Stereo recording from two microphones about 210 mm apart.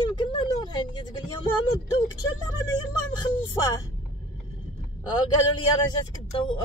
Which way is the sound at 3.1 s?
20° left (ahead or behind).